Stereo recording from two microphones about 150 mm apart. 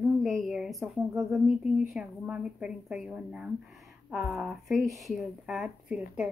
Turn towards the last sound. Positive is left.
turn(degrees=-5)  # may be behind; listen again after turning